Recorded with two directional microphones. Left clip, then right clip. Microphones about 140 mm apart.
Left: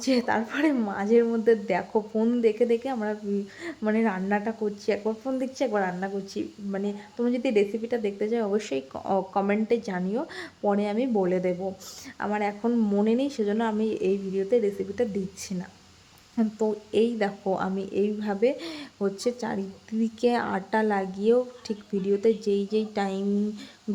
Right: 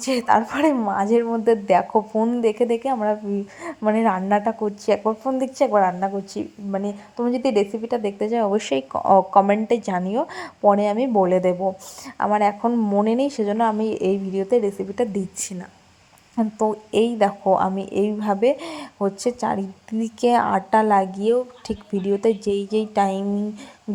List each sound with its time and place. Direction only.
0.0 s a woman's voice: 30° right (ahead or behind)
2.1 s speech: 10° right (ahead or behind)
2.4 s a woman's voice: 25° right (ahead or behind)
12.6 s speech: 15° right (ahead or behind)
13.1 s a woman's voice: 30° right (ahead or behind)